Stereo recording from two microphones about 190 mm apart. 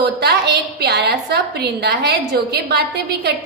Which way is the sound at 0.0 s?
60° right (ahead or behind).